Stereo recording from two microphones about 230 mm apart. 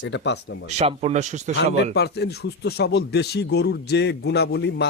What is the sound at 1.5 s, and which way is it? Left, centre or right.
Speech, left.